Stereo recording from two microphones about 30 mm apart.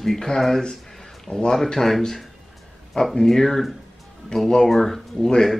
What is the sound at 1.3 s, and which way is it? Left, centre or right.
Speech, left.